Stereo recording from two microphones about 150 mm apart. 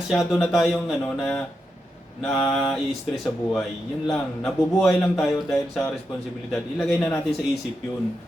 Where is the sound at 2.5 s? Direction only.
5° left (ahead or behind).